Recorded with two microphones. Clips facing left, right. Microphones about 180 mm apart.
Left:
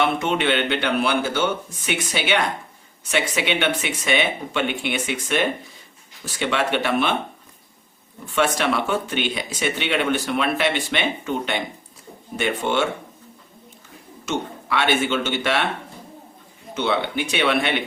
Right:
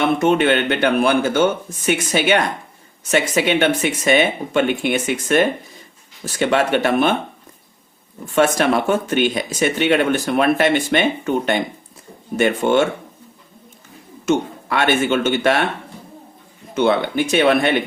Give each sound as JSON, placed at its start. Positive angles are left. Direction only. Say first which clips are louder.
{"t": 0.0, "sound": "speech", "louder": "right 5 dB", "side_deg": -45}
{"t": 8.4, "sound": "speech", "louder": "right 5 dB", "side_deg": -45}
{"t": 14.3, "sound": "speech", "louder": "right 7 dB", "side_deg": -50}
{"t": 16.7, "sound": "speech", "louder": "right 6 dB", "side_deg": -50}